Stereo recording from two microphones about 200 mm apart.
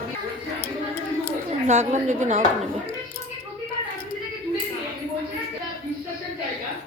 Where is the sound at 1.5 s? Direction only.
35° right (ahead or behind).